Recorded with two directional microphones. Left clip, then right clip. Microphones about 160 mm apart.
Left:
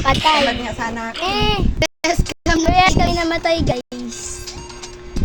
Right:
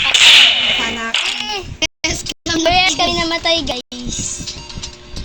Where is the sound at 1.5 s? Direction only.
90° left.